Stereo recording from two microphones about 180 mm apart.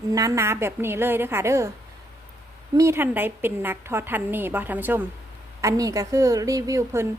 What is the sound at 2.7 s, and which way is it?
A woman's voice, 15° right (ahead or behind).